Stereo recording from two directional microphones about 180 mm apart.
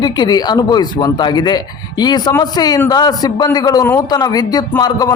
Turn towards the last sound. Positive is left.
turn(degrees=20)  # may be behind; listen again after turning